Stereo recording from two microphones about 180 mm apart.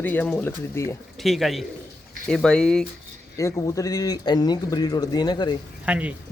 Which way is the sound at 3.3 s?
20° left (ahead or behind).